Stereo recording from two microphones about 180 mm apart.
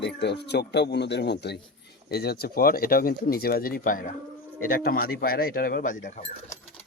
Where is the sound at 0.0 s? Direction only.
70° left (ahead or behind); by 6.2 s 45° left (ahead or behind).